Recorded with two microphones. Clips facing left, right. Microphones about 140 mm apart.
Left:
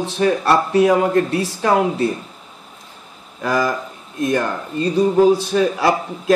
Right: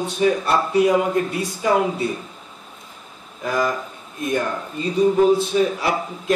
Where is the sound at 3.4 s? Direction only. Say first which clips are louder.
Left 3 dB; 90° left.